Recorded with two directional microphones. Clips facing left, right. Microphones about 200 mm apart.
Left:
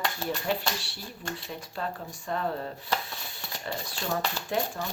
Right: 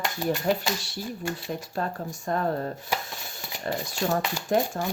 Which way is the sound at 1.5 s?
45° right (ahead or behind).